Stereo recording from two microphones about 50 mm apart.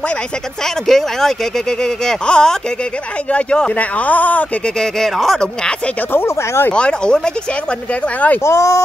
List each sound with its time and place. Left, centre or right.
0.8 s speech: centre; by 4.5 s left
5.0 s speech: centre
6.2 s speech: left
6.7 s speech: centre
8.5 s speech: left